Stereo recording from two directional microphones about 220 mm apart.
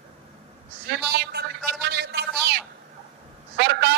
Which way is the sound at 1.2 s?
50° right (ahead or behind).